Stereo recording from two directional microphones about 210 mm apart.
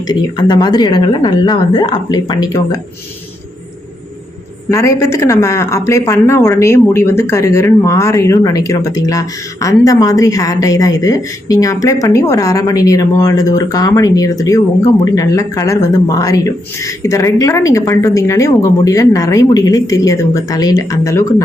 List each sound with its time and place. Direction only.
0.1 s a woman's voice: 20° left (ahead or behind)
4.7 s speech: 15° left (ahead or behind)